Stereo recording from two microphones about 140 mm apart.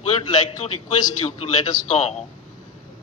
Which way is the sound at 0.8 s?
55° left (ahead or behind).